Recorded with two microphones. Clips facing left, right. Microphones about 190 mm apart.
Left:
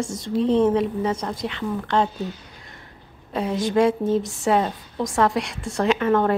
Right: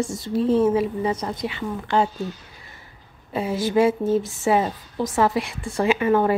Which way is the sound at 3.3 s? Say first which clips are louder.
Even; 5° right (ahead or behind).